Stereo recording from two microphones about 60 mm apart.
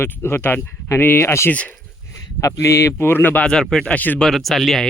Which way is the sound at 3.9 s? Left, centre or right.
Left.